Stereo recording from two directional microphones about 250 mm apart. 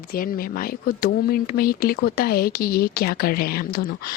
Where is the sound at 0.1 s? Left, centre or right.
Left.